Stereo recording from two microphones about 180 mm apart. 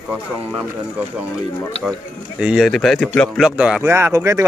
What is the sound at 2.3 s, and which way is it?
Speech, 5° right (ahead or behind).